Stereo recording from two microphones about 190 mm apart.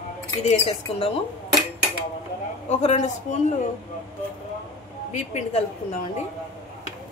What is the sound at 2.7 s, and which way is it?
Speech, 35° left (ahead or behind).